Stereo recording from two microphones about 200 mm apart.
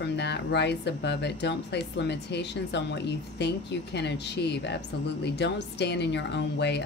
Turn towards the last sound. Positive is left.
turn(degrees=60)  # may be behind; listen again after turning